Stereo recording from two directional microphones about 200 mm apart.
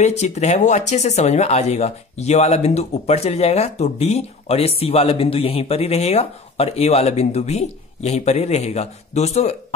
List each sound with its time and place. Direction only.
0.0 s speech: 35° left (ahead or behind)